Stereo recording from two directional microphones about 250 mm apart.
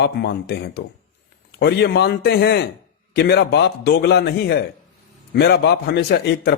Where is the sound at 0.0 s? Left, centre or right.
Left.